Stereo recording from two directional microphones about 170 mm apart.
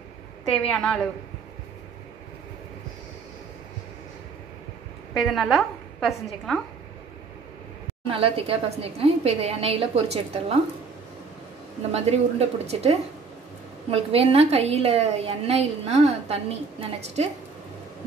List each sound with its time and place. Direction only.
0.7 s a woman's voice: 5° left (ahead or behind)
5.1 s a woman's voice: centre (ahead or behind)
8.1 s a woman's voice: 35° right (ahead or behind)
11.9 s a woman's voice: 40° right (ahead or behind)